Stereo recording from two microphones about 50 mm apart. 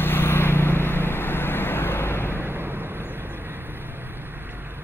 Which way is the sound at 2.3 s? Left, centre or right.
Right.